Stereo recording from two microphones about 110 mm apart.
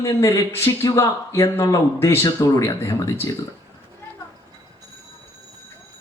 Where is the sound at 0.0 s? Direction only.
30° left (ahead or behind).